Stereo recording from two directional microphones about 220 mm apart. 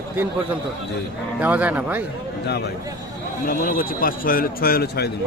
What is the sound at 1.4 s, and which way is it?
Speech, 5° right (ahead or behind).